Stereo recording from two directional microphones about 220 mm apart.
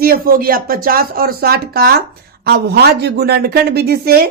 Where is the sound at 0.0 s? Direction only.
40° right (ahead or behind).